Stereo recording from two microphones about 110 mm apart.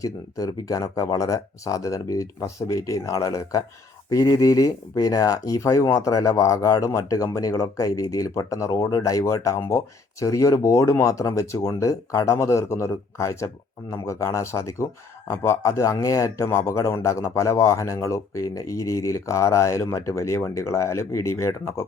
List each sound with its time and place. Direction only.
0.0 s speech: 35° left (ahead or behind)